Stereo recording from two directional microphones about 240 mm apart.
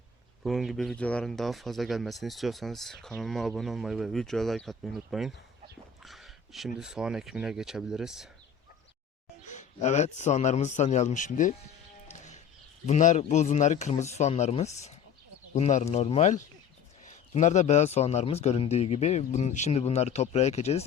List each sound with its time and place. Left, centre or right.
0.4 s speech: centre
6.0 s a sound: centre
6.7 s speech: centre
9.4 s speech: left
12.0 s music: left
12.8 s speech: left